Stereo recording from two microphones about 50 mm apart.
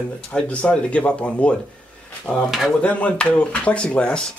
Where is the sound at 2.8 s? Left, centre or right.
Left.